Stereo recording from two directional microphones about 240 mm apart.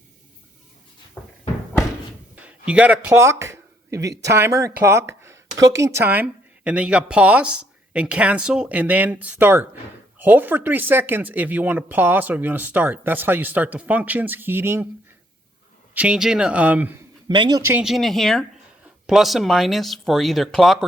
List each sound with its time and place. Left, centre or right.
1.2 s cupboard open or close: centre
2.3 s a sound: centre
4.2 s speech: centre
16.0 s speech: centre
17.2 s speech: centre
17.7 s speech: centre